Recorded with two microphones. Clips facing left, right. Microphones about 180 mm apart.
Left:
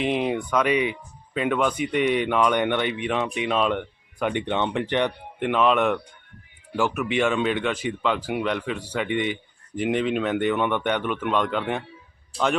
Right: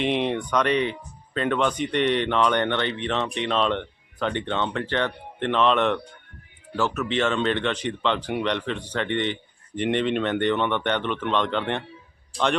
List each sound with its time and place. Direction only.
0.0 s speech: 5° left (ahead or behind)